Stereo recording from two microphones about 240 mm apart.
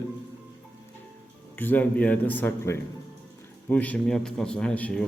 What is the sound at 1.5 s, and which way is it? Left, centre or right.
A man's voice, centre.